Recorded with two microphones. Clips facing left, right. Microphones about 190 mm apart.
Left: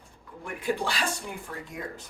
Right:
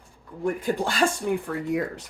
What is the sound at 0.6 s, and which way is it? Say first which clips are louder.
Speech: right 1 dB; 45° right (ahead or behind).